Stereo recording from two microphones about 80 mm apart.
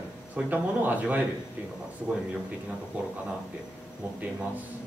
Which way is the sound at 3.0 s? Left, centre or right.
Centre.